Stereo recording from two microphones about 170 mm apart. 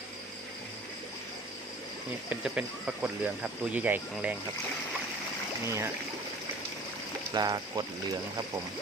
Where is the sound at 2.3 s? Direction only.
5° right (ahead or behind).